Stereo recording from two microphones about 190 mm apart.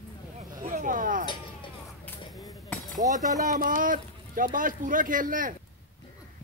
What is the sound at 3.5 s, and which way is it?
Speech, 45° right (ahead or behind).